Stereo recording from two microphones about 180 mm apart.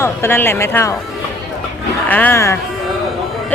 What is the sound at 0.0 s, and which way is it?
Speech, 15° left (ahead or behind).